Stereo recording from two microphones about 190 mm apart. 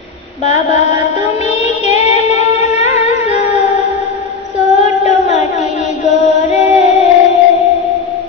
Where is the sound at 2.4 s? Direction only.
35° left (ahead or behind).